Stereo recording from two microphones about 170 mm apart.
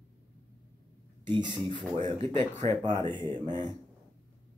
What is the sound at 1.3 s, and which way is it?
Speech, 25° right (ahead or behind).